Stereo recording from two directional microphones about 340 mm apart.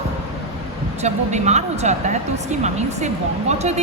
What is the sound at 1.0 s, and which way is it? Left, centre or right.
Speech, centre.